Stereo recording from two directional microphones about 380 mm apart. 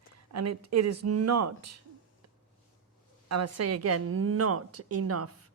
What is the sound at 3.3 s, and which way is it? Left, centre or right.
A woman's voice, right.